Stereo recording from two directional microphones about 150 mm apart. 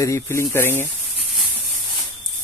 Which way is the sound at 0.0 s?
20° left (ahead or behind).